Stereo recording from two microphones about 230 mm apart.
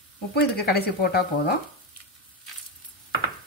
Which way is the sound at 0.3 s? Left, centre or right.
Left.